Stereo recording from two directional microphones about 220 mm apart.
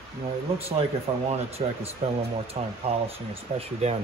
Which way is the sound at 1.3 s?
30° right (ahead or behind).